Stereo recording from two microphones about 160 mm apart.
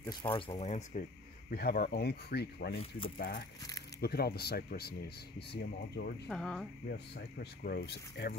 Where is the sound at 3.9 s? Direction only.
80° left.